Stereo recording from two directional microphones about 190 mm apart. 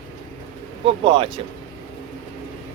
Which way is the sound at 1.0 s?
25° right (ahead or behind).